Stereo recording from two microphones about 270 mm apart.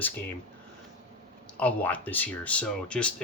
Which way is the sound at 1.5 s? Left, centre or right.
Centre.